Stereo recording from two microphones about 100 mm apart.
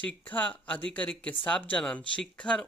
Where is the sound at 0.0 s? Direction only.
15° left (ahead or behind).